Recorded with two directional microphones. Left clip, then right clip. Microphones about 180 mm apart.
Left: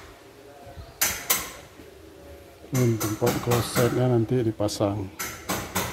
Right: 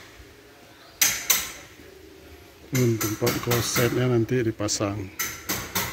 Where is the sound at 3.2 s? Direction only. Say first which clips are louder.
Left 1 dB; 5° right (ahead or behind).